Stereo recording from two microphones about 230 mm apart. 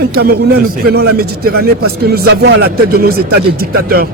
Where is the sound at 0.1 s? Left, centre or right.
Right.